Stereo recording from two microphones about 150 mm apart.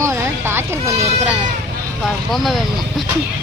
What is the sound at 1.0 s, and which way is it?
Speech, 45° right (ahead or behind).